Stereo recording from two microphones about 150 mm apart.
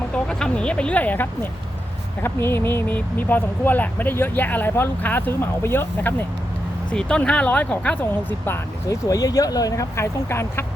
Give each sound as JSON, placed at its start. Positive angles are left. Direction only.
{"t": 0.1, "sound": "speech", "side_deg": 5}